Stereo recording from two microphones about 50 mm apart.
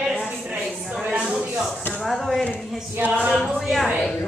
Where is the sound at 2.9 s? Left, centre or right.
Right.